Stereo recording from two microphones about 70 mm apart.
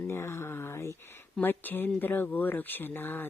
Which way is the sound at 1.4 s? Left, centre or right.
Left.